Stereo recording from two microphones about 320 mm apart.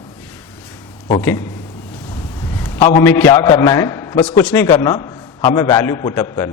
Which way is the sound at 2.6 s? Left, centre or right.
Centre.